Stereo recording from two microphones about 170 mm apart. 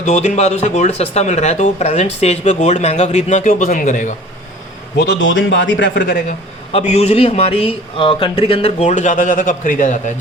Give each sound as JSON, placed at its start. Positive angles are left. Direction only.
{"t": 0.0, "sound": "speech", "side_deg": 45}
{"t": 4.9, "sound": "a man's voice", "side_deg": 90}
{"t": 6.7, "sound": "a man's voice", "side_deg": 40}